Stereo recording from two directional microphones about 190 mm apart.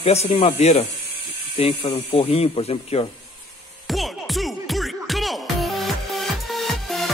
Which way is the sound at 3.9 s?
Centre (ahead or behind).